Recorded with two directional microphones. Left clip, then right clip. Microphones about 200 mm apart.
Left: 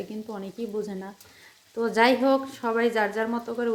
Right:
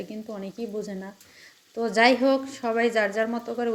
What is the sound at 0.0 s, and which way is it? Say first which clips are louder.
A woman's voice: even; centre (ahead or behind).